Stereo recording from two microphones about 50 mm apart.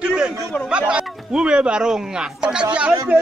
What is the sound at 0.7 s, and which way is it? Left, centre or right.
A man's voice, centre.